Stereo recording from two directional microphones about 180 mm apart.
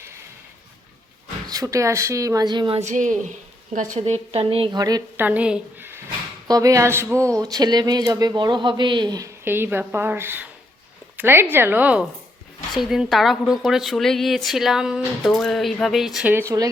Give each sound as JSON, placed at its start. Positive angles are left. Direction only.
{"t": 1.5, "sound": "speech", "side_deg": -20}
{"t": 5.2, "sound": "a woman's voice", "side_deg": -10}